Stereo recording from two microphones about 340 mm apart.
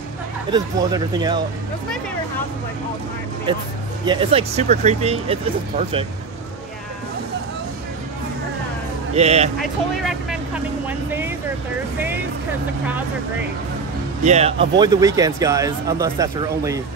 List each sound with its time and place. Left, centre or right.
0.5 s speech: centre
4.0 s speech: centre
9.1 s speech: centre
9.6 s speech: centre
14.2 s speech: centre